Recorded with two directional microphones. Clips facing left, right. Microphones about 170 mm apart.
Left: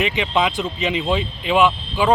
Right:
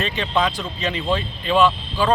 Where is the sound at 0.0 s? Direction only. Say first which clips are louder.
Left 2 dB; 15° left (ahead or behind).